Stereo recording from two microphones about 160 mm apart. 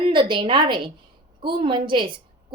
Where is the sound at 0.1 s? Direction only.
30° right (ahead or behind).